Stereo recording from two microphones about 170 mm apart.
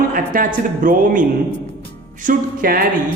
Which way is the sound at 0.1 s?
55° right (ahead or behind).